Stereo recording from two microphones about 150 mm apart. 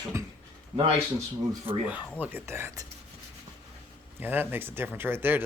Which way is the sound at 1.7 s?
15° right (ahead or behind).